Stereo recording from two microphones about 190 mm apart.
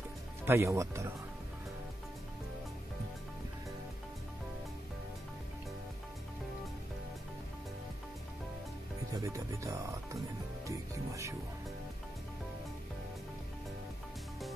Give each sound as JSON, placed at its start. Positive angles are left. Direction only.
{"t": 0.5, "sound": "speech", "side_deg": -15}
{"t": 9.1, "sound": "speech", "side_deg": -15}